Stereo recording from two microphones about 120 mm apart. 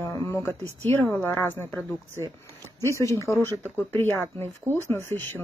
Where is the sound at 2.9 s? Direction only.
25° left (ahead or behind).